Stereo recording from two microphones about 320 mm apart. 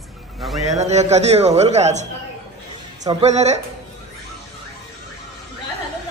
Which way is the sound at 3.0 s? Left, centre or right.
Centre.